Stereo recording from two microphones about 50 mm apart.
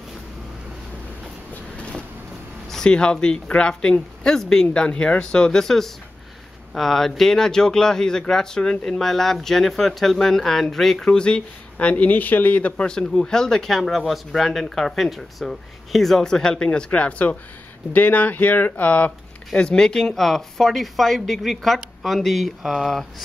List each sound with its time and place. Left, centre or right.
1.8 s vehicle: left
2.7 s speech: centre
11.1 s speech: centre
11.9 s speech: left
19.6 s speech: centre
22.6 s speech: centre
22.8 s speech: centre